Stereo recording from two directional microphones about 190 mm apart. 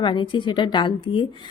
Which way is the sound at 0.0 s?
25° left (ahead or behind).